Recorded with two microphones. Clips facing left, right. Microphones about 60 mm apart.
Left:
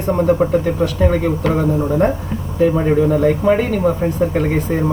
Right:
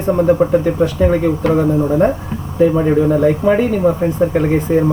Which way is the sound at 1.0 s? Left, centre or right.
Centre.